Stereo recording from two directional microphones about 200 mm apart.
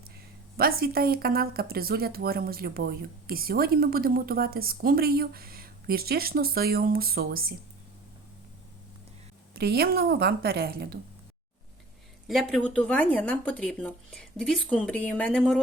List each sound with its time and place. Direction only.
0.5 s speech: 50° right (ahead or behind)
9.6 s speech: 50° right (ahead or behind)
12.3 s speech: centre (ahead or behind)